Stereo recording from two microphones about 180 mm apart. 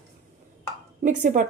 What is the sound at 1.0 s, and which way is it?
Speech, 45° right (ahead or behind).